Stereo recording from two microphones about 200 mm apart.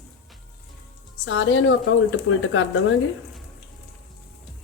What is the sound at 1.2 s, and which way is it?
Speech, 70° left (ahead or behind).